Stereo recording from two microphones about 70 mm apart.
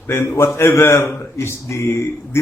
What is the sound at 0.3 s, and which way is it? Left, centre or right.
A man's voice, left.